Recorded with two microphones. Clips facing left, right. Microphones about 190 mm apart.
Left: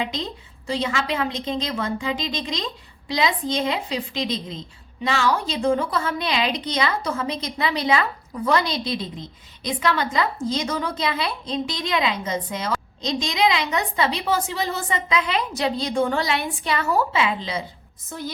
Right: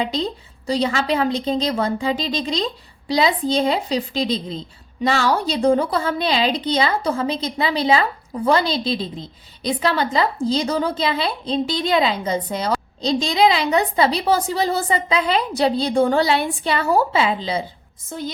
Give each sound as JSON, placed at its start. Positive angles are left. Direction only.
{"t": 0.0, "sound": "a woman's voice", "side_deg": -35}